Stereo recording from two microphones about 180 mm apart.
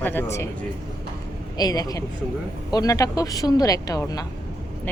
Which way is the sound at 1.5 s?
20° left (ahead or behind).